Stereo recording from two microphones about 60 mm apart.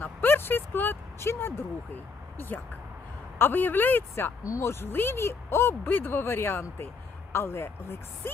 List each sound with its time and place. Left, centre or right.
0.0 s a sound: left
3.3 s speech: left
4.1 s speech: left